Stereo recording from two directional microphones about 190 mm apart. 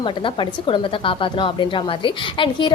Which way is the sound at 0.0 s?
25° left (ahead or behind).